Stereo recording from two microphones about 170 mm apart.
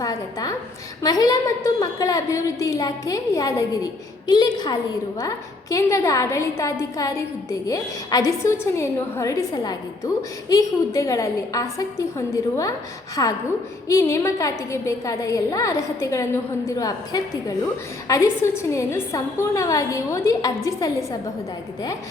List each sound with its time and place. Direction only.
0.0 s a woman's voice: 20° left (ahead or behind)